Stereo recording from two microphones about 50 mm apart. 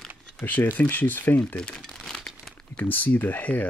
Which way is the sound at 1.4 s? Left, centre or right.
Left.